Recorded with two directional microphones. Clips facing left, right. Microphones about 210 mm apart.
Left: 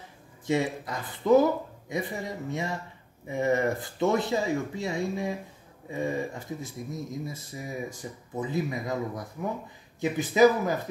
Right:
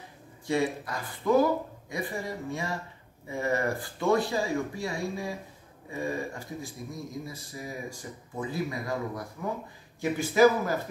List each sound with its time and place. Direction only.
0.5 s speech: 20° left (ahead or behind)